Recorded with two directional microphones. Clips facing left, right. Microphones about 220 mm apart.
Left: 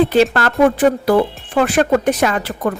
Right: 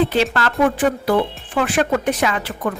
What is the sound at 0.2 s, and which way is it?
Speech, 45° left (ahead or behind).